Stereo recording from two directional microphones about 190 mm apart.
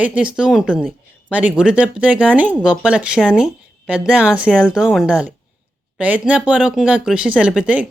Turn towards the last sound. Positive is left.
turn(degrees=-5)  # may be behind; listen again after turning